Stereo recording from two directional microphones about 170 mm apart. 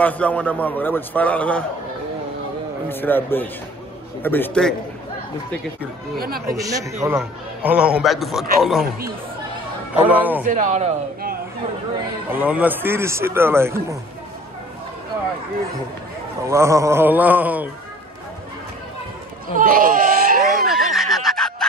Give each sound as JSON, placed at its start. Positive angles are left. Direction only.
{"t": 0.0, "sound": "a man's voice", "side_deg": 10}
{"t": 2.9, "sound": "a man's voice", "side_deg": 10}
{"t": 6.1, "sound": "speech", "side_deg": -60}
{"t": 6.5, "sound": "a man's voice", "side_deg": -20}
{"t": 10.0, "sound": "a man's voice", "side_deg": -10}
{"t": 10.4, "sound": "speech", "side_deg": -50}
{"t": 12.3, "sound": "a man's voice", "side_deg": -10}
{"t": 16.4, "sound": "a man's voice", "side_deg": -15}
{"t": 19.5, "sound": "baby cry", "side_deg": -55}
{"t": 20.4, "sound": "snicker", "side_deg": 0}